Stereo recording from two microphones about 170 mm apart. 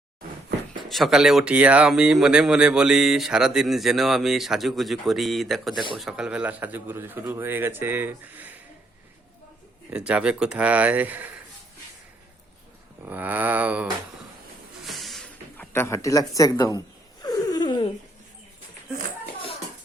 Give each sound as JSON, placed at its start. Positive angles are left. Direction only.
{"t": 0.9, "sound": "speech", "side_deg": 0}
{"t": 9.9, "sound": "speech", "side_deg": -5}
{"t": 13.1, "sound": "speech", "side_deg": -10}
{"t": 14.8, "sound": "a sound", "side_deg": 0}
{"t": 15.7, "sound": "speech", "side_deg": 15}
{"t": 17.2, "sound": "a sound", "side_deg": 25}